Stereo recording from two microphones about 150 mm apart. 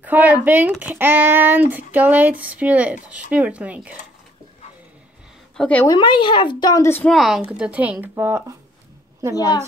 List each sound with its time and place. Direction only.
0.0 s speech: 10° right (ahead or behind)
5.6 s a woman's voice: 10° left (ahead or behind)
5.9 s speech: 30° left (ahead or behind); by 7.1 s 15° left (ahead or behind)
7.1 s speech: centre (ahead or behind); by 8.5 s 15° right (ahead or behind)